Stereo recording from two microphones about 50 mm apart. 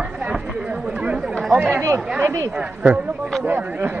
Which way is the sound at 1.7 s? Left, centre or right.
Right.